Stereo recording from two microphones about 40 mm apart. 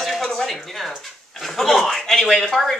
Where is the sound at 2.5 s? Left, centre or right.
Centre.